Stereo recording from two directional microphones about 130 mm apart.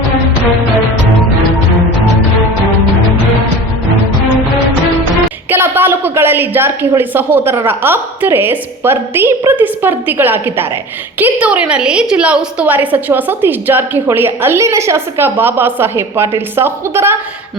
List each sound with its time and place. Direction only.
5.5 s a woman's voice: 15° right (ahead or behind)